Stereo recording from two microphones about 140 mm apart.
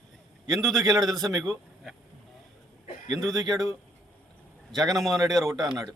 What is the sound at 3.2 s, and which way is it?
Speech, centre (ahead or behind).